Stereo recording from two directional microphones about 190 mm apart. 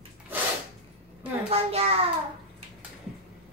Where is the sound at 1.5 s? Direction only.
30° right (ahead or behind).